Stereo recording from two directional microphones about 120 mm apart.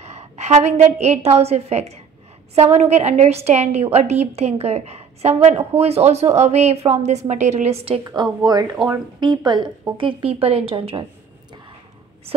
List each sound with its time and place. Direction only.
0.0 s a woman's voice: 65° right (ahead or behind)
8.0 s a woman's voice: 30° right (ahead or behind)
9.9 s a woman's voice: 50° right (ahead or behind)